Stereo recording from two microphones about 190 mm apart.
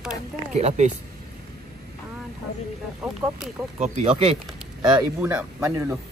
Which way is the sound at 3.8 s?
40° right (ahead or behind).